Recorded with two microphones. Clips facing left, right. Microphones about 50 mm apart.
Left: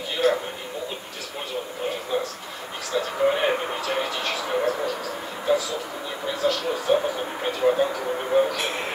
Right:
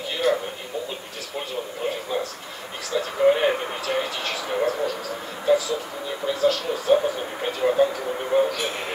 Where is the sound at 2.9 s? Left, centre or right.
Centre.